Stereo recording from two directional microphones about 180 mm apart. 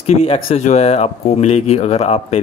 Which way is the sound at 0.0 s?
35° left (ahead or behind).